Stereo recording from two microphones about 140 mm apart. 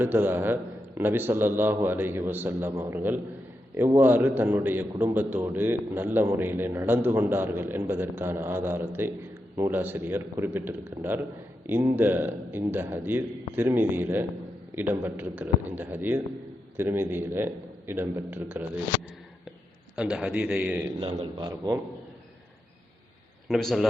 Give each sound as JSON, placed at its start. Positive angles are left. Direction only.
{"t": 0.0, "sound": "a man's voice", "side_deg": -15}
{"t": 20.0, "sound": "a man's voice", "side_deg": -5}
{"t": 21.3, "sound": "a man's voice", "side_deg": -30}
{"t": 23.5, "sound": "a man's voice", "side_deg": 0}